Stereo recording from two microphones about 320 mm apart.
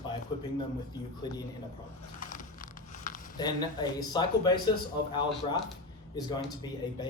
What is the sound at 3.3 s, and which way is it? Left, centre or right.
Speech, centre.